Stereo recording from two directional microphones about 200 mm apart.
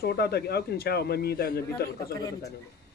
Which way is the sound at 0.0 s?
55° left (ahead or behind).